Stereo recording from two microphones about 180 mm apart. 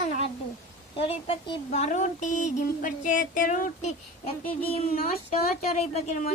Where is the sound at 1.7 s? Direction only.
40° left (ahead or behind).